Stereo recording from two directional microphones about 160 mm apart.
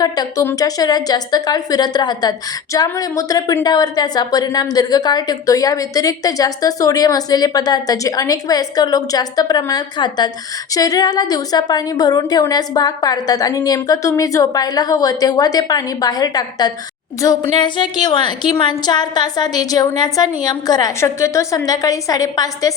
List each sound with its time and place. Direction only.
0.0 s a woman's voice: 20° left (ahead or behind)